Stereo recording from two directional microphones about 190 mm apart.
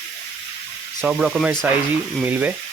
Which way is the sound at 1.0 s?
5° right (ahead or behind).